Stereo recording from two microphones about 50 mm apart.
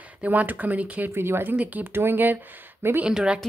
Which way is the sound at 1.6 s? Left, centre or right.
Right.